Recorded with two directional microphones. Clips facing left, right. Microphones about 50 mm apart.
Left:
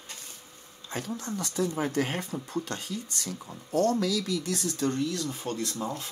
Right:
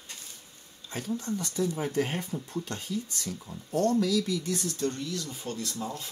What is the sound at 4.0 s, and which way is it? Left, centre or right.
Speech, left.